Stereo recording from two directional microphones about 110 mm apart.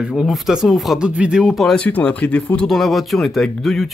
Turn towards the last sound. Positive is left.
turn(degrees=0)  # may be behind; listen again after turning